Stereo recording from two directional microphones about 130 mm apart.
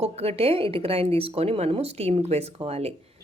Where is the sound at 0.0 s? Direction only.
50° right (ahead or behind).